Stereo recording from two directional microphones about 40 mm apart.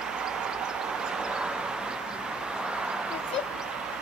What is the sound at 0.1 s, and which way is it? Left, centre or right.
Vehicle, centre.